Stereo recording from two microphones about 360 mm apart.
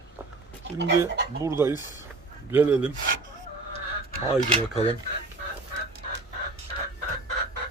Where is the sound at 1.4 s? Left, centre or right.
Centre.